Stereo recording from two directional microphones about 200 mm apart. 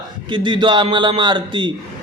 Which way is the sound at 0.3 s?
25° right (ahead or behind).